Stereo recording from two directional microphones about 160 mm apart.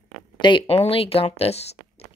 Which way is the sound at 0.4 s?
30° left (ahead or behind).